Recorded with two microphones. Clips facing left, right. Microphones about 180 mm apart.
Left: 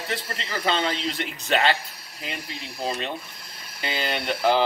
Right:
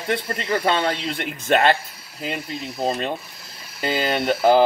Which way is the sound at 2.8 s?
40° right (ahead or behind).